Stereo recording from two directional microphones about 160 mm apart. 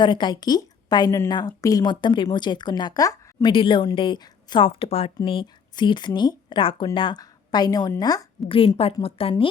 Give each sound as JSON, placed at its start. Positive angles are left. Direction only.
{"t": 0.0, "sound": "a woman's voice", "side_deg": 30}
{"t": 8.4, "sound": "a woman's voice", "side_deg": 35}